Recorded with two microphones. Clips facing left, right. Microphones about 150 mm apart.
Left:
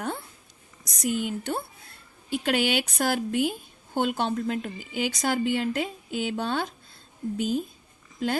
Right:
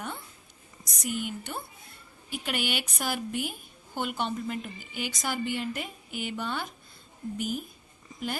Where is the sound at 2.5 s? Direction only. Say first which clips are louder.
Left 7 dB; 90° left.